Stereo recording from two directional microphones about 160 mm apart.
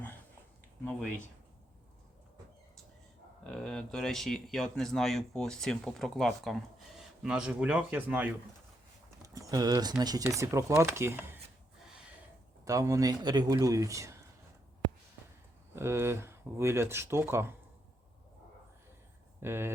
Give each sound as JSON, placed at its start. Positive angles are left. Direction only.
{"t": 3.4, "sound": "speech", "side_deg": 5}
{"t": 9.2, "sound": "speech", "side_deg": -20}
{"t": 12.6, "sound": "speech", "side_deg": -20}
{"t": 15.7, "sound": "speech", "side_deg": -15}
{"t": 19.4, "sound": "speech", "side_deg": -15}